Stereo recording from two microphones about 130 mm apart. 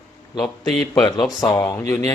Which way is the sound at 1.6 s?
20° left (ahead or behind).